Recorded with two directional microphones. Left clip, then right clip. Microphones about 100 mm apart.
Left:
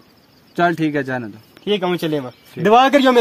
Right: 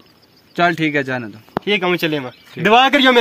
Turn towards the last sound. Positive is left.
turn(degrees=80)